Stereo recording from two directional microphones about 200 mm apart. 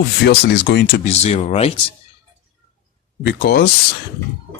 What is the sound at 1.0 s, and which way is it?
Speech, 35° left (ahead or behind).